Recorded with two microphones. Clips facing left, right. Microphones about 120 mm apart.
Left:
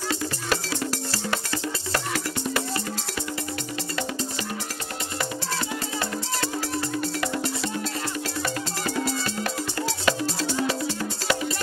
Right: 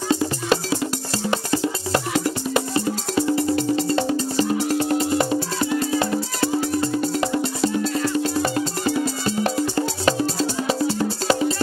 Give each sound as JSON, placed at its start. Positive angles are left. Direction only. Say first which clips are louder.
{"t": 0.1, "sound": "music", "louder": "right 8 dB", "side_deg": -25}
{"t": 7.0, "sound": "music", "louder": "right 6 dB", "side_deg": -25}